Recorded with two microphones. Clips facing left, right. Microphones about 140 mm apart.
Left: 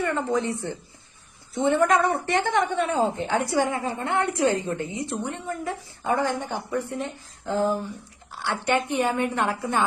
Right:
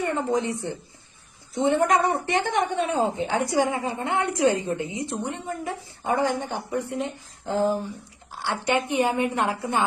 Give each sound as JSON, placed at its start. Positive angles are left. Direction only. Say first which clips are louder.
{"t": 0.0, "sound": "a woman's voice", "louder": "even", "side_deg": -20}